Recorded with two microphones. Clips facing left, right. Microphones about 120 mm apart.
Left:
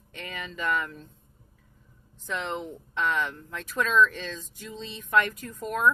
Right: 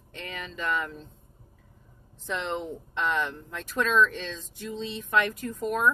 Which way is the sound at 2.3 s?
Centre (ahead or behind).